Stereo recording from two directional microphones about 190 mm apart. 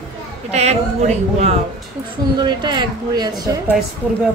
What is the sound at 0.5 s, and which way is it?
Speech, 35° right (ahead or behind).